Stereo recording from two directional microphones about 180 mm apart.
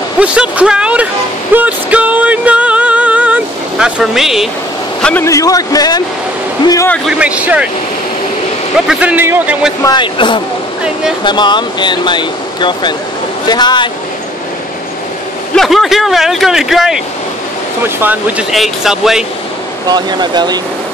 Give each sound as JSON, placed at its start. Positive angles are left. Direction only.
{"t": 0.2, "sound": "speech", "side_deg": -5}
{"t": 1.5, "sound": "music", "side_deg": -10}
{"t": 5.0, "sound": "speech", "side_deg": 15}
{"t": 7.1, "sound": "speech", "side_deg": -5}
{"t": 8.8, "sound": "speech", "side_deg": -10}
{"t": 9.8, "sound": "speech", "side_deg": 25}
{"t": 15.5, "sound": "speech", "side_deg": 0}
{"t": 18.5, "sound": "speech", "side_deg": 0}
{"t": 19.9, "sound": "speech", "side_deg": -25}